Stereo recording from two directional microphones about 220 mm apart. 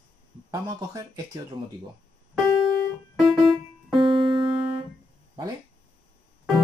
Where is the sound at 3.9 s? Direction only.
25° right (ahead or behind).